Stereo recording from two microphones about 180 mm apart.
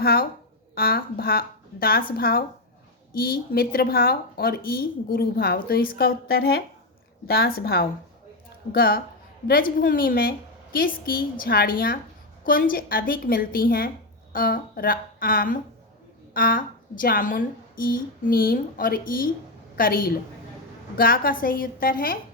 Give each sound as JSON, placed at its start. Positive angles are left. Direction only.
{"t": 0.0, "sound": "a woman's voice", "side_deg": 55}